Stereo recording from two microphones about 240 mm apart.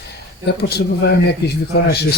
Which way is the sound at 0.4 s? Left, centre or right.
Left.